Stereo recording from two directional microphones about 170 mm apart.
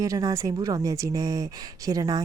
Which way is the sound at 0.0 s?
20° right (ahead or behind).